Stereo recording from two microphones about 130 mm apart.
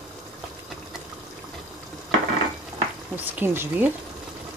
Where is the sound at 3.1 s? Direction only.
15° right (ahead or behind).